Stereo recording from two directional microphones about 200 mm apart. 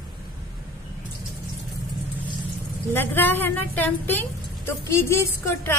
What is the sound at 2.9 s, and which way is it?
A woman's voice, 10° left (ahead or behind).